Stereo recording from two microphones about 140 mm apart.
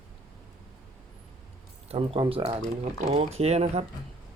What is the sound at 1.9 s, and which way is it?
Speech, 40° right (ahead or behind).